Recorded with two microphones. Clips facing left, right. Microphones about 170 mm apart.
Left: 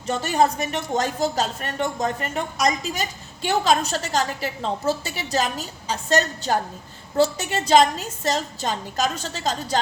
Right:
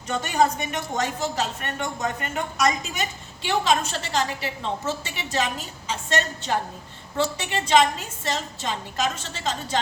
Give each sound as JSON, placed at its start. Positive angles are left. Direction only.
{"t": 0.1, "sound": "speech", "side_deg": 35}